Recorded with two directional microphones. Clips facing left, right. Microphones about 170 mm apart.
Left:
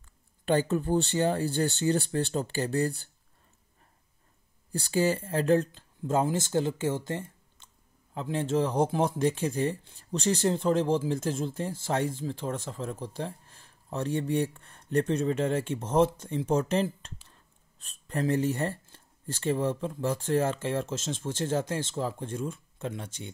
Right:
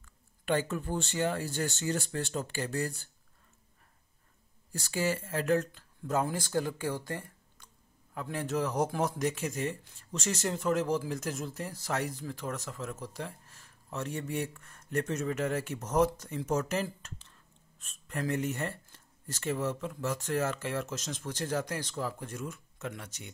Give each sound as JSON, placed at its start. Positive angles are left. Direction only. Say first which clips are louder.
{"t": 0.5, "sound": "speech", "louder": "left 5 dB", "side_deg": 35}
{"t": 4.7, "sound": "speech", "louder": "left 5 dB", "side_deg": 30}